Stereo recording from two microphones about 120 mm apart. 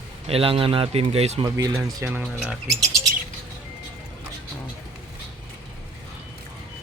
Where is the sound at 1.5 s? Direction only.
30° right (ahead or behind).